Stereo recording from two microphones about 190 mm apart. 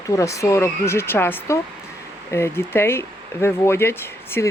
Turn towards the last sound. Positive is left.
turn(degrees=10)  # may be behind; listen again after turning